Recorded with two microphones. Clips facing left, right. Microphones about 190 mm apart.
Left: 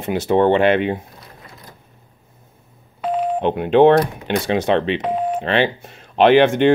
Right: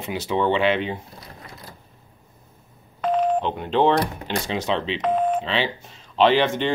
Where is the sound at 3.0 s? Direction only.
10° left (ahead or behind).